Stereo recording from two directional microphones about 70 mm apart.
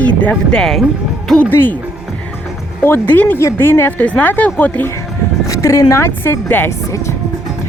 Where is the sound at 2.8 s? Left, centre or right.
Left.